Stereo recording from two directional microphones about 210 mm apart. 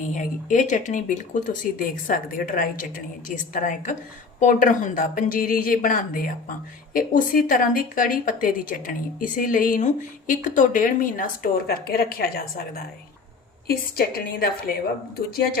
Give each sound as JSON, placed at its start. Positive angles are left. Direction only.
{"t": 0.1, "sound": "a woman's voice", "side_deg": 35}